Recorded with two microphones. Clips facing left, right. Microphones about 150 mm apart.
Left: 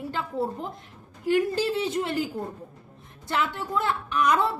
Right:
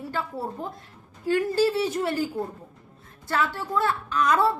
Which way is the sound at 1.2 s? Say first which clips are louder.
Right 1 dB; 20° left (ahead or behind).